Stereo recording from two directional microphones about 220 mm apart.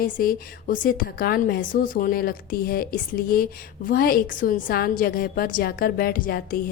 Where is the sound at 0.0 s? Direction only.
40° left (ahead or behind).